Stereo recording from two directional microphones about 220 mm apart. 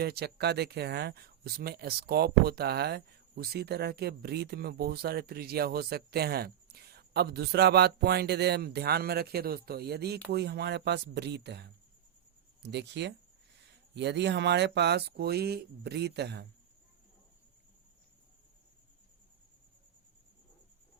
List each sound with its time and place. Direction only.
0.0 s speech: 45° right (ahead or behind)